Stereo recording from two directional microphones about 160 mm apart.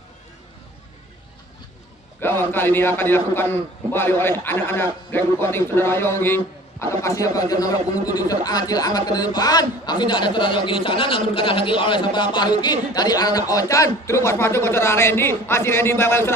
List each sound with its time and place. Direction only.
2.1 s a man's voice: 15° left (ahead or behind)